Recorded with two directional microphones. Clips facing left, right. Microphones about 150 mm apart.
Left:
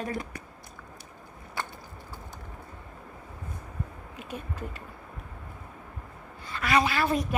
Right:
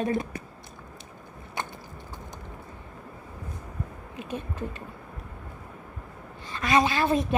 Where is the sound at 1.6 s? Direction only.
20° right (ahead or behind).